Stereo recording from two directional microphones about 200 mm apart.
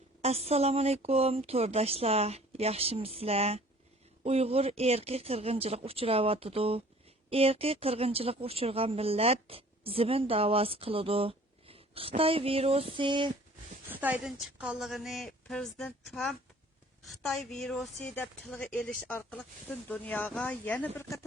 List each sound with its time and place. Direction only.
0.2 s a woman's voice: 30° right (ahead or behind)
13.9 s a woman's voice: 10° right (ahead or behind); by 21.2 s 10° left (ahead or behind)